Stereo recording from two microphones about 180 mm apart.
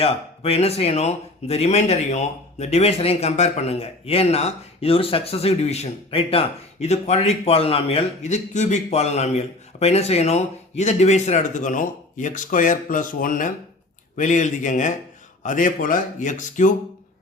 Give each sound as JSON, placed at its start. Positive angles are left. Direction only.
{"t": 0.0, "sound": "a man's voice", "side_deg": 35}